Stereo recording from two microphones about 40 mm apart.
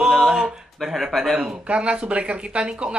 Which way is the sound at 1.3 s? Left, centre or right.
Right.